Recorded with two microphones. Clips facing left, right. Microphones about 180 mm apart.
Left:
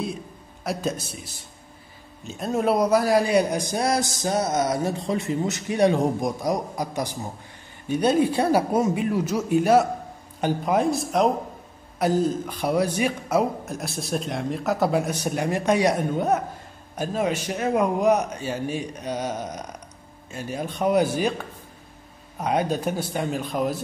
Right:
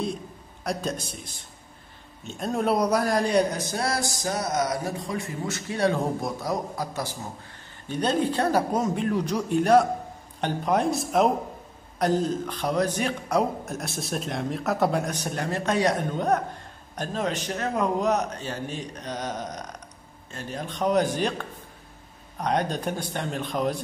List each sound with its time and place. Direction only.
0.7 s a man's voice: 5° left (ahead or behind)